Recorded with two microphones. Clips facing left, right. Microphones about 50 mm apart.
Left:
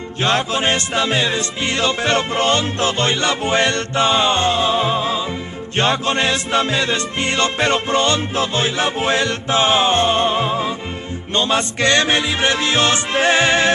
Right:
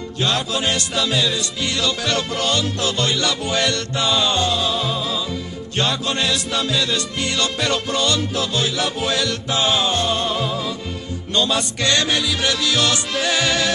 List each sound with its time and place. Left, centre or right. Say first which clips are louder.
0.2 s music: left 4 dB; left